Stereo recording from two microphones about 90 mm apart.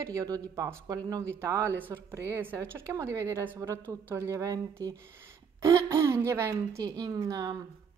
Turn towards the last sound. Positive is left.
turn(degrees=-45)  # may be behind; listen again after turning